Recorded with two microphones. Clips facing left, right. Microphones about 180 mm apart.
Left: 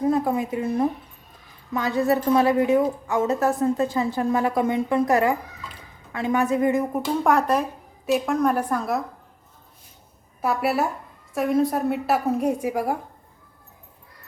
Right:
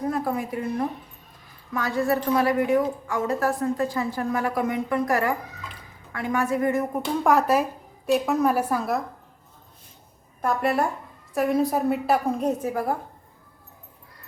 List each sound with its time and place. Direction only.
0.0 s a woman's voice: 20° left (ahead or behind)
6.9 s a woman's voice: centre (ahead or behind)
10.4 s a woman's voice: 5° left (ahead or behind)